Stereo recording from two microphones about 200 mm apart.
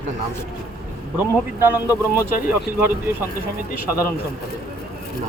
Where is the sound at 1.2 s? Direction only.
10° right (ahead or behind).